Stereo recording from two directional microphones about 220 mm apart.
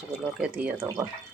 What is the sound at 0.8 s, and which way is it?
Speech, 15° right (ahead or behind).